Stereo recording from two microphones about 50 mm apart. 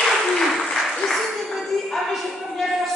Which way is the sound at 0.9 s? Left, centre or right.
Centre.